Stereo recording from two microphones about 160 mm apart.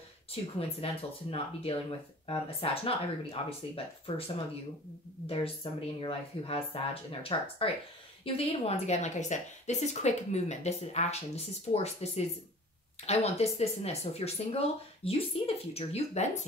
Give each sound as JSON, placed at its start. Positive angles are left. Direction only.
{"t": 0.3, "sound": "speech", "side_deg": 40}
{"t": 5.2, "sound": "speech", "side_deg": 35}